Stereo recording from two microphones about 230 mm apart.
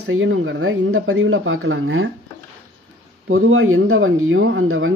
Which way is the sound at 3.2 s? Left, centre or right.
Right.